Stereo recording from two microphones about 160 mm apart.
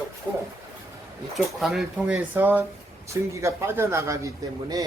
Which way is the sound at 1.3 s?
Centre (ahead or behind).